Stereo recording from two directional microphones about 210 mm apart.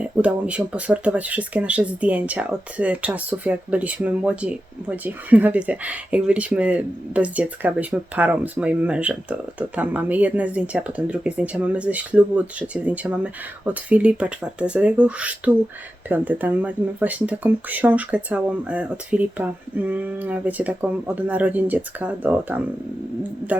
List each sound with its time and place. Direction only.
0.0 s speech: 5° right (ahead or behind)